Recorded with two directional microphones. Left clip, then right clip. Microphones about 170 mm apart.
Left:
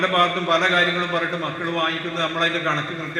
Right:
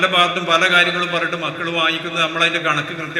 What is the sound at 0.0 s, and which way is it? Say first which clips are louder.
A man's voice: right 3 dB; 35° right (ahead or behind).